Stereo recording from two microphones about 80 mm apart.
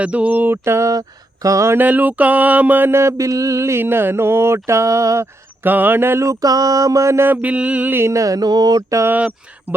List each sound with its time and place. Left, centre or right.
0.0 s mantra: centre; by 1.7 s right
1.7 s mantra: right
5.6 s music: right
6.4 s mantra: right
7.3 s music: centre
8.1 s mantra: right
9.0 s music: centre